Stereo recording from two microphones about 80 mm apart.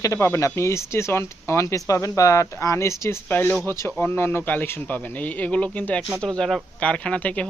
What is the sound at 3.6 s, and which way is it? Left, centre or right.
Speech, left.